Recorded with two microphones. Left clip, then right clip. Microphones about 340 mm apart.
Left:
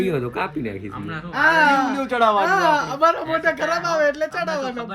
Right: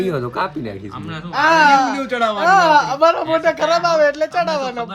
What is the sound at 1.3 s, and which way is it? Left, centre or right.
Speech, right.